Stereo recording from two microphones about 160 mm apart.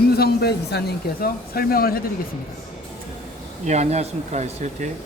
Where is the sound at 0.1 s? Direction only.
90° left; by 2.0 s 70° left (ahead or behind).